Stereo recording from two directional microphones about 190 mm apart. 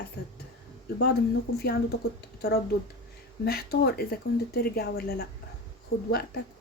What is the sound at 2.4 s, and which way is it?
Speech, 55° left (ahead or behind).